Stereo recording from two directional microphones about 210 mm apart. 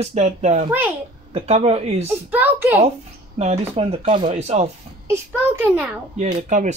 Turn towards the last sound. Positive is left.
turn(degrees=-35)  # may be behind; listen again after turning